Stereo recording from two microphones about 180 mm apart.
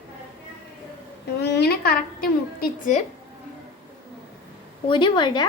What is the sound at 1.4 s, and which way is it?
Speech, 65° left (ahead or behind).